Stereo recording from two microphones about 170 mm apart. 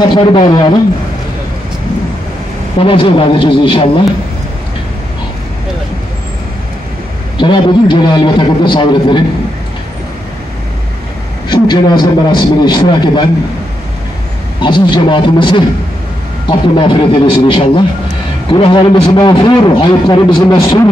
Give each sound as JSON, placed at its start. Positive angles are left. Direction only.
{"t": 0.0, "sound": "a man's voice", "side_deg": 25}
{"t": 2.8, "sound": "a man's voice", "side_deg": 30}
{"t": 7.3, "sound": "a man's voice", "side_deg": 30}
{"t": 11.4, "sound": "a man's voice", "side_deg": 25}
{"t": 14.6, "sound": "a man's voice", "side_deg": 25}